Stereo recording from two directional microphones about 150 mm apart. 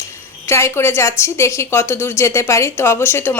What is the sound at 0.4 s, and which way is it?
A woman's voice, 20° left (ahead or behind).